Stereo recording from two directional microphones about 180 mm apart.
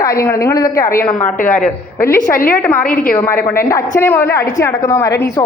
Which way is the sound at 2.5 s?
10° left (ahead or behind).